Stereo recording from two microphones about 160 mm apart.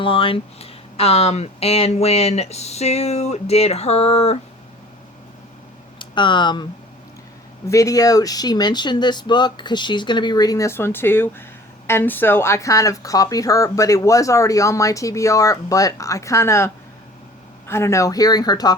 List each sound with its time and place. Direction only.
0.0 s speech: 35° left (ahead or behind)
6.0 s speech: 30° left (ahead or behind)
7.7 s speech: 20° left (ahead or behind)